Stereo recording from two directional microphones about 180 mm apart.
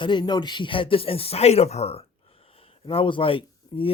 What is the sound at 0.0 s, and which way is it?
Speech, 25° left (ahead or behind).